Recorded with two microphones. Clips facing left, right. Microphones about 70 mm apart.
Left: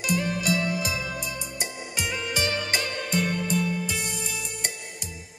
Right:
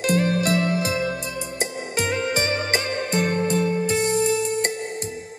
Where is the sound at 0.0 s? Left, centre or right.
Right.